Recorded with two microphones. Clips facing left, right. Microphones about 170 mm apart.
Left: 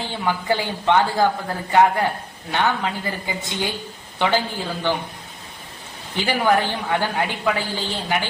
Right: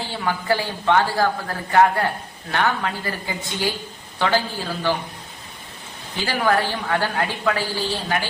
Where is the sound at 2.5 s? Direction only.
20° left (ahead or behind).